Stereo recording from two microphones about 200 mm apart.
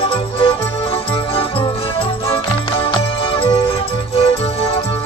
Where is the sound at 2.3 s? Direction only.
25° left (ahead or behind).